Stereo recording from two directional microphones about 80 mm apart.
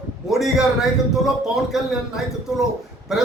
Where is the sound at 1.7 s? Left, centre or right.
Centre.